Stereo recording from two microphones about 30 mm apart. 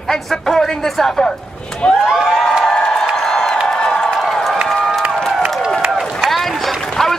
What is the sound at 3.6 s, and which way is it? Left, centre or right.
Crowd, left.